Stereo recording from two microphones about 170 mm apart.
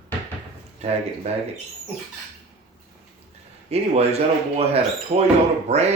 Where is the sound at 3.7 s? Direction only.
35° right (ahead or behind).